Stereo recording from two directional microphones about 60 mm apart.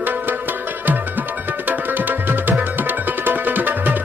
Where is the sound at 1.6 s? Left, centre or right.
Right.